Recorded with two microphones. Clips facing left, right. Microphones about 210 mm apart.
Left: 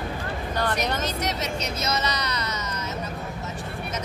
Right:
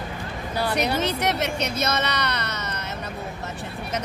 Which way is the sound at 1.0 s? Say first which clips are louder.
Right 4 dB; 60° right (ahead or behind).